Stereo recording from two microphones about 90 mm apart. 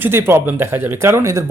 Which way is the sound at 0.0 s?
25° right (ahead or behind).